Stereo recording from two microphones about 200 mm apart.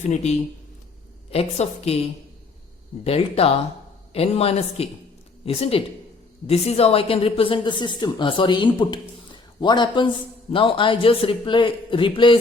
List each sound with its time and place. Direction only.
0.1 s a woman's voice: 35° left (ahead or behind)
3.0 s a woman's voice: 30° left (ahead or behind)